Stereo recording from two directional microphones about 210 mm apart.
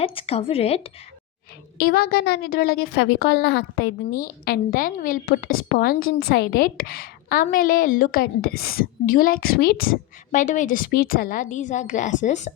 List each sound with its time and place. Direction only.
0.0 s speech: 25° left (ahead or behind)
1.8 s a woman's voice: 45° left (ahead or behind)
4.2 s a woman's voice: 45° left (ahead or behind)